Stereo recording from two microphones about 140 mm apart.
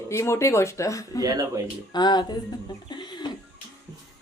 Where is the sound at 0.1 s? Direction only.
20° left (ahead or behind).